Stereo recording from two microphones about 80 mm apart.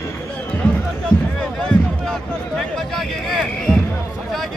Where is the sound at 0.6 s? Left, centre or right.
Centre.